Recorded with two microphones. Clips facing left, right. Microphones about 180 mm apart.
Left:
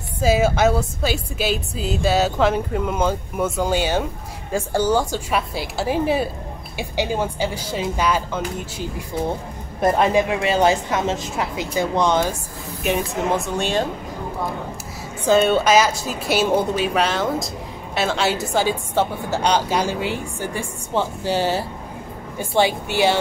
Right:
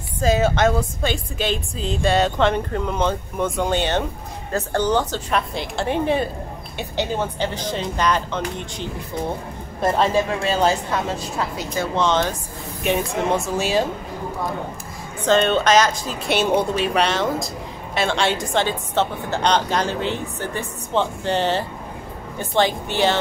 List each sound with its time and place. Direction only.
0.2 s a woman's voice: 10° left (ahead or behind)
15.2 s a woman's voice: 10° left (ahead or behind)